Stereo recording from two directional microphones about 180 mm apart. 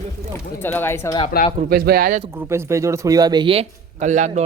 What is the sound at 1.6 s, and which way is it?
Speech, 55° right (ahead or behind).